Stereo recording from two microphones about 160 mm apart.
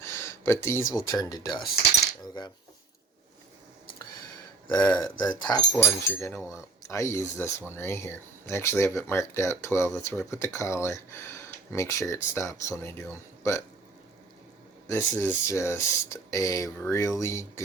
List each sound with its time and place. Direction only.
0.0 s a sound: 15° left (ahead or behind)
1.0 s speech: 20° left (ahead or behind)
4.8 s speech: 10° left (ahead or behind)
5.0 s speech: 25° left (ahead or behind)
14.8 s speech: 15° left (ahead or behind)